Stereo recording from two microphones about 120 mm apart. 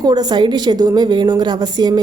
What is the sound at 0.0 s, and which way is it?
A woman's voice, 35° right (ahead or behind).